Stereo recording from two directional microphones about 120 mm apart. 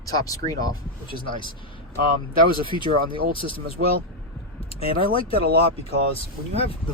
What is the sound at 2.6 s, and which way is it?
Speech, 45° left (ahead or behind).